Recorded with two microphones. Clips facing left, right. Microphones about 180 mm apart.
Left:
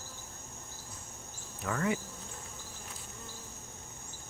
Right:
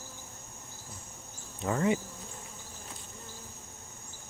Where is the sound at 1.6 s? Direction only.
25° right (ahead or behind).